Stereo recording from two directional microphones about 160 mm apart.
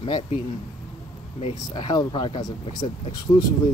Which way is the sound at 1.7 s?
25° left (ahead or behind).